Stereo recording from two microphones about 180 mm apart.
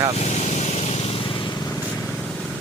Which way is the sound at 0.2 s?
40° left (ahead or behind).